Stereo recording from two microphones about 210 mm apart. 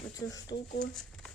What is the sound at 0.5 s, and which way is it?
Speech, 45° left (ahead or behind).